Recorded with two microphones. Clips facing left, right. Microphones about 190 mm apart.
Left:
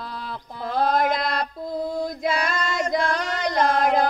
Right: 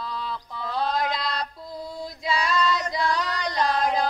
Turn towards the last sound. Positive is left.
turn(degrees=50)  # may be behind; listen again after turning